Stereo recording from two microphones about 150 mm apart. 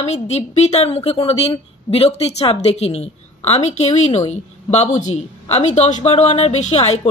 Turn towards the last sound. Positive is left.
turn(degrees=45)  # may be behind; listen again after turning